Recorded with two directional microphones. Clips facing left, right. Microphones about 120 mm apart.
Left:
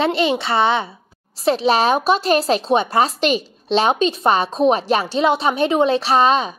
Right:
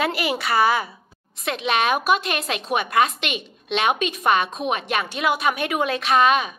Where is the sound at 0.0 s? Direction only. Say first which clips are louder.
Left 6 dB; 25° left (ahead or behind).